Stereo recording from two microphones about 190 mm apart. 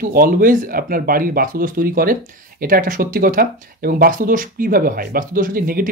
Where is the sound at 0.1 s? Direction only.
45° right (ahead or behind).